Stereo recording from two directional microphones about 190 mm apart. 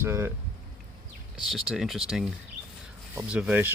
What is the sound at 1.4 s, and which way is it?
Speech, centre (ahead or behind).